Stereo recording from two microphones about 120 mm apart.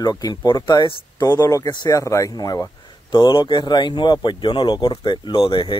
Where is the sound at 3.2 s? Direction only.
40° left (ahead or behind).